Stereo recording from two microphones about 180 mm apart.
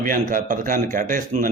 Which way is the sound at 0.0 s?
50° right (ahead or behind).